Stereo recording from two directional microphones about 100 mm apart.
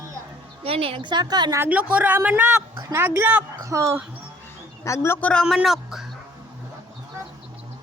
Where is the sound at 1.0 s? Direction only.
45° right (ahead or behind).